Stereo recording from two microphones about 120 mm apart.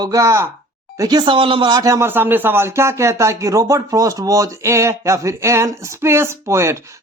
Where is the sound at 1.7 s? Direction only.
25° right (ahead or behind).